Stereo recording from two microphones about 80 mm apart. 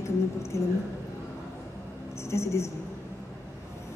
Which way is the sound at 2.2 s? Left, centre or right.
Left.